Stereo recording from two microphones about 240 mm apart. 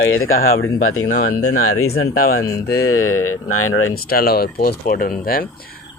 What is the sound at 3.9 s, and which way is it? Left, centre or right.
Speech, left.